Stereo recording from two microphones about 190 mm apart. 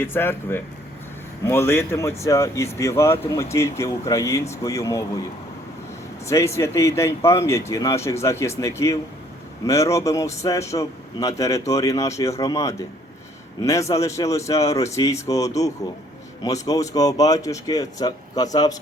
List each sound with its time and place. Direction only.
0.0 s a man's voice: 10° left (ahead or behind)
6.2 s a man's voice: 15° left (ahead or behind)